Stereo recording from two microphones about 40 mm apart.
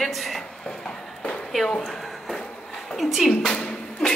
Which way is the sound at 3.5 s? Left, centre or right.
Centre.